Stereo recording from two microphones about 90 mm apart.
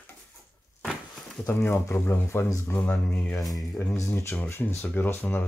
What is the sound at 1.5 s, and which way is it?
Speech, 30° left (ahead or behind).